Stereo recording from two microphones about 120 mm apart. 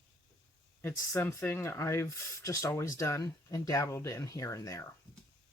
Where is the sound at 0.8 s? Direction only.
15° left (ahead or behind).